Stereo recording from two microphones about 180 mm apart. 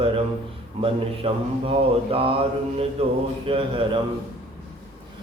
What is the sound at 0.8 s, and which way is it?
Speech, 30° right (ahead or behind).